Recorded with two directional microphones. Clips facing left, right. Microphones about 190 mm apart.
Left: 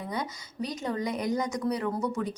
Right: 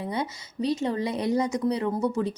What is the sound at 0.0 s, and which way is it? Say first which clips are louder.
Speech: right 4 dB; 25° right (ahead or behind).